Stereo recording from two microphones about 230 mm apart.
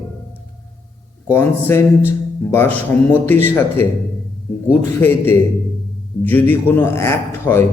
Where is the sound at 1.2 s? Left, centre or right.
Centre.